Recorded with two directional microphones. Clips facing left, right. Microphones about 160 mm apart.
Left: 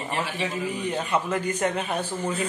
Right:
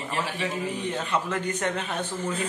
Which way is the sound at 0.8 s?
10° left (ahead or behind).